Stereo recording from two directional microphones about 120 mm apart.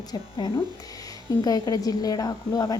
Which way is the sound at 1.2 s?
30° left (ahead or behind).